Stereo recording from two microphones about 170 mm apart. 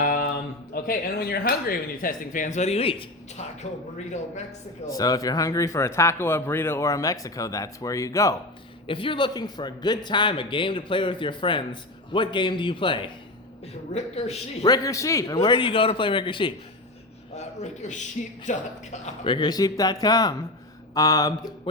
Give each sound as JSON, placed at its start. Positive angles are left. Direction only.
{"t": 0.0, "sound": "a sound", "side_deg": 55}
{"t": 0.7, "sound": "speech", "side_deg": 60}
{"t": 4.9, "sound": "a man's voice", "side_deg": 20}
{"t": 8.9, "sound": "a man's voice", "side_deg": 30}
{"t": 14.6, "sound": "a man's voice", "side_deg": 20}
{"t": 17.3, "sound": "speech", "side_deg": 45}
{"t": 19.2, "sound": "a man's voice", "side_deg": 25}